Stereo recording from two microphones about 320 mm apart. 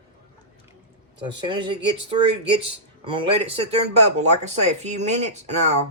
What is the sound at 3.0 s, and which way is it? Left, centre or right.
Speech, centre.